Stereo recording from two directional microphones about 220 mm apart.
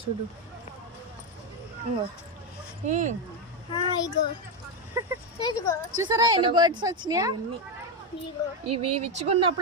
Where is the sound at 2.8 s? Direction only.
35° right (ahead or behind).